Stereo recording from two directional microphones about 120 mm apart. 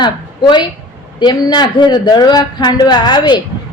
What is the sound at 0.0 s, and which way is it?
A woman's voice, 40° left (ahead or behind).